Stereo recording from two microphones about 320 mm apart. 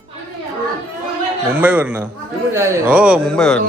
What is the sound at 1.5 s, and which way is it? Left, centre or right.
A man's voice, centre.